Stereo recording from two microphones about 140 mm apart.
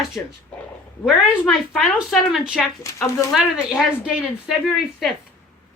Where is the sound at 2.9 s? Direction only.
25° left (ahead or behind).